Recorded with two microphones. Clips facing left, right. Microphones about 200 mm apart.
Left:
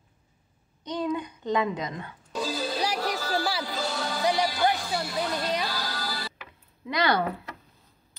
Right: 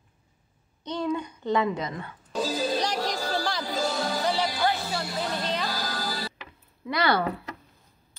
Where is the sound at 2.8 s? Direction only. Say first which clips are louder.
Right 1 dB; 10° left (ahead or behind).